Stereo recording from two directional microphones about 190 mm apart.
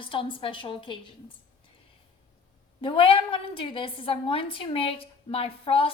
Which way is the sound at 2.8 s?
25° left (ahead or behind).